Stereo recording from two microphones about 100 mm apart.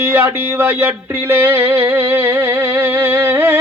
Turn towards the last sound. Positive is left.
turn(degrees=-20)  # may be behind; listen again after turning